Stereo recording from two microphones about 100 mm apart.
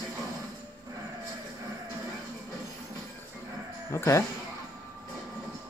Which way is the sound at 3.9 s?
30° left (ahead or behind).